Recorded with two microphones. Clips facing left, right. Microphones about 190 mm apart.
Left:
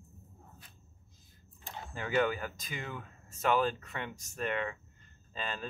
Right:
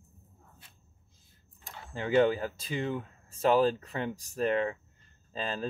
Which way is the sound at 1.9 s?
30° right (ahead or behind).